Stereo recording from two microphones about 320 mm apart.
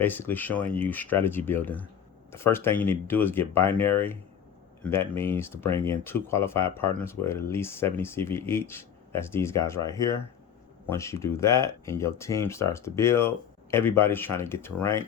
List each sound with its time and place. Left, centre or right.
0.0 s speech: centre
5.6 s speech: centre
5.9 s speech: centre